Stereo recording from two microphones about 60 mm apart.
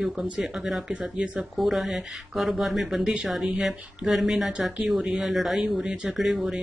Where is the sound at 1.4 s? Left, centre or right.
Centre.